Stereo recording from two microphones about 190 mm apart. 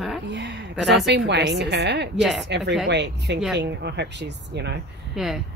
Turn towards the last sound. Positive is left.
turn(degrees=0)  # may be behind; listen again after turning